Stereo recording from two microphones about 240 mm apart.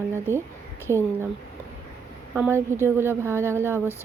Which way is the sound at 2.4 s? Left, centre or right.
Centre.